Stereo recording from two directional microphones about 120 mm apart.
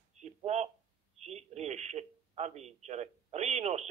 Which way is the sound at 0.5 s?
65° right (ahead or behind).